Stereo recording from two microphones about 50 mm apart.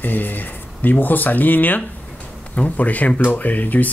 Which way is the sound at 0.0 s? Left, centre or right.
Left.